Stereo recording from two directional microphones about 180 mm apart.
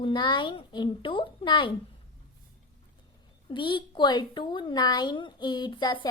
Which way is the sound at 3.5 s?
25° left (ahead or behind).